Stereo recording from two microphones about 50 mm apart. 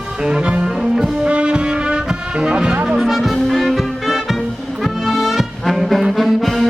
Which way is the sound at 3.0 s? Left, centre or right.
Centre.